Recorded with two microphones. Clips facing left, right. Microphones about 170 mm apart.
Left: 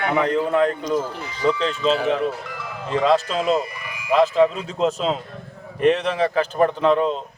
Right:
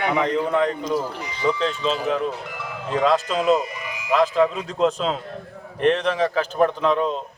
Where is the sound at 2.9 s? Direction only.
Centre (ahead or behind).